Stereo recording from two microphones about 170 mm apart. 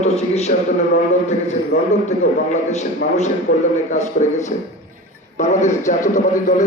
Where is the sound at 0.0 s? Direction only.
40° left (ahead or behind).